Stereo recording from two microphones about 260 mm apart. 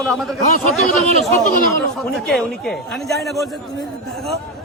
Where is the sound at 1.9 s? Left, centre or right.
Centre.